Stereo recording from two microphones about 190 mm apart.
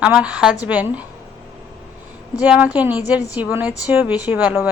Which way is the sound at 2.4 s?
10° right (ahead or behind).